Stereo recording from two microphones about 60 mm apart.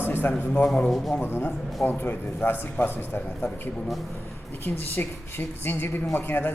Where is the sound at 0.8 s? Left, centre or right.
Centre.